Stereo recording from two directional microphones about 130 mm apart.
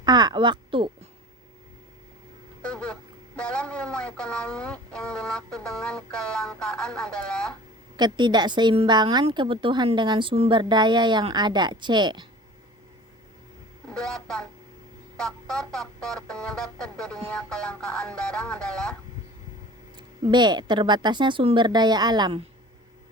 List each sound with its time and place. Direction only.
0.0 s speech: 35° right (ahead or behind)
2.6 s speech: 5° left (ahead or behind)
7.9 s speech: 35° right (ahead or behind)
13.9 s music: 5° left (ahead or behind)
20.0 s speech: 35° right (ahead or behind)